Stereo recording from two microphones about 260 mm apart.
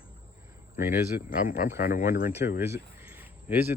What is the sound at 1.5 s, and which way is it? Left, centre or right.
Speech, left.